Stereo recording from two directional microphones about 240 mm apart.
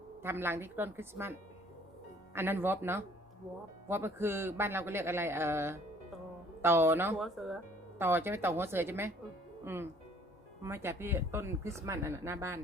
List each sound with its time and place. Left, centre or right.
0.2 s speech: centre